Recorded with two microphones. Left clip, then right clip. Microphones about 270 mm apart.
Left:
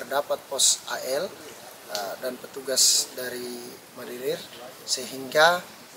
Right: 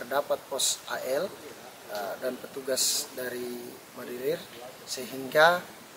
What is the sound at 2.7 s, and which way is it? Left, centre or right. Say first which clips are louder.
Speech: left 6 dB; centre.